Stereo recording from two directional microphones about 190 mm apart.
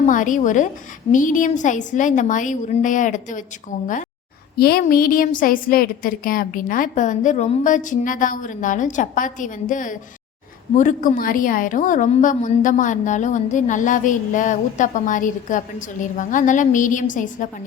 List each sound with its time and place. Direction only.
0.0 s a woman's voice: 45° left (ahead or behind)
4.5 s a woman's voice: 55° left (ahead or behind)